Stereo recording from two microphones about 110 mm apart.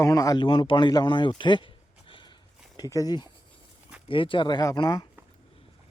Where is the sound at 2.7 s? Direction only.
35° left (ahead or behind).